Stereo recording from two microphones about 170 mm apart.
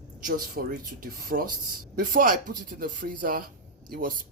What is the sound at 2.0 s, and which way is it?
Speech, 55° right (ahead or behind).